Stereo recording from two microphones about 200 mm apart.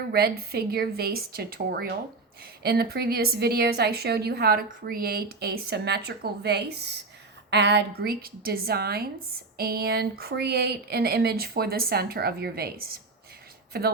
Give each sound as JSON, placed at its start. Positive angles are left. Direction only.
{"t": 0.1, "sound": "a woman's voice", "side_deg": -50}